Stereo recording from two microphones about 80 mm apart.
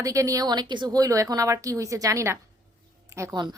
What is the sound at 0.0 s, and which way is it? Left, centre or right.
A woman's voice, right.